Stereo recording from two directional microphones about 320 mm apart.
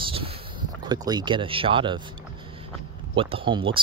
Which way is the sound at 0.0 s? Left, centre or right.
Centre.